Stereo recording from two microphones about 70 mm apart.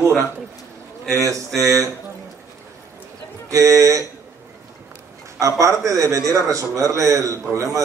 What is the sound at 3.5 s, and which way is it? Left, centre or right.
Speech, right.